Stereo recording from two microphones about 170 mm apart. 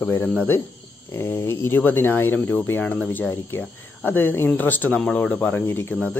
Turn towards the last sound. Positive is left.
turn(degrees=10)  # may be behind; listen again after turning